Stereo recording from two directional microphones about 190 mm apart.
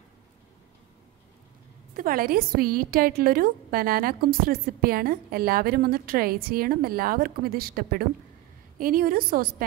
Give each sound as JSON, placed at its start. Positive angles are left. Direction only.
{"t": 2.0, "sound": "a woman's voice", "side_deg": -50}